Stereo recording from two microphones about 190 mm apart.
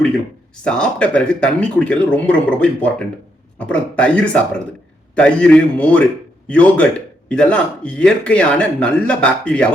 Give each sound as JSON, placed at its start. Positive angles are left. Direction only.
{"t": 0.6, "sound": "speech", "side_deg": 5}